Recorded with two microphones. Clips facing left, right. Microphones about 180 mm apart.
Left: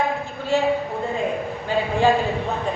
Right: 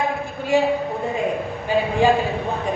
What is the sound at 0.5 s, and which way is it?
Speech, 15° right (ahead or behind).